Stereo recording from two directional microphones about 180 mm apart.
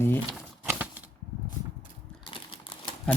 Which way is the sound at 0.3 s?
10° right (ahead or behind).